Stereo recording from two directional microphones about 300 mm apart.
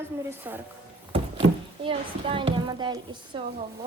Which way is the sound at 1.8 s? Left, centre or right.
Centre.